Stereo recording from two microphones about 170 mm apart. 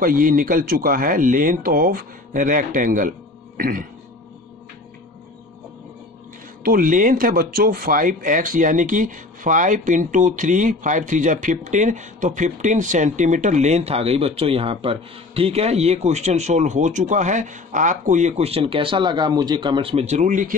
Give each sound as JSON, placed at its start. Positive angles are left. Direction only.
{"t": 0.0, "sound": "a man's voice", "side_deg": -55}
{"t": 6.6, "sound": "speech", "side_deg": -55}